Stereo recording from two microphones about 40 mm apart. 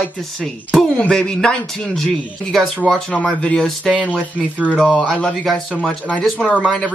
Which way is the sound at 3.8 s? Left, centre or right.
Centre.